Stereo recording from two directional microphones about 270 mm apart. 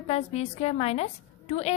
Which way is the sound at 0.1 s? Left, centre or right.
Left.